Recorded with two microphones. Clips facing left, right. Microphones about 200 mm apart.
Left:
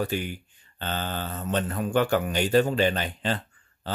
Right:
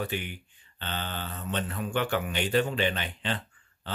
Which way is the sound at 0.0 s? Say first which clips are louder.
Left 5 dB; 40° left (ahead or behind).